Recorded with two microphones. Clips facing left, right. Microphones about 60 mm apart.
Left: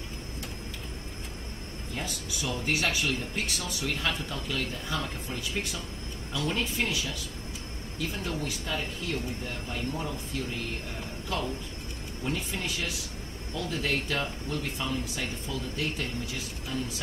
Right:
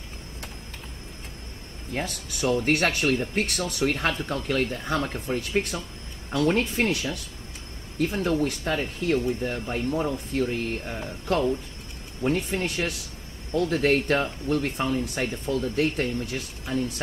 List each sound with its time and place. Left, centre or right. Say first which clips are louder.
2.0 s speech: right 6 dB; right